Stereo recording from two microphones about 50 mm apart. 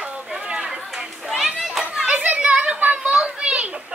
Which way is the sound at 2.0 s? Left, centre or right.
Right.